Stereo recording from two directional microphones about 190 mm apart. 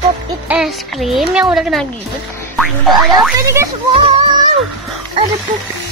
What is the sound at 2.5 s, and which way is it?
Music, centre (ahead or behind).